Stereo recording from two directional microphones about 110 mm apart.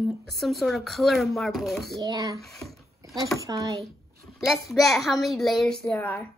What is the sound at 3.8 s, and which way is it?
A woman's voice, centre (ahead or behind).